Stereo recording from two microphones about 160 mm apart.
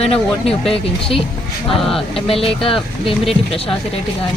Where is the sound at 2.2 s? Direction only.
35° left (ahead or behind).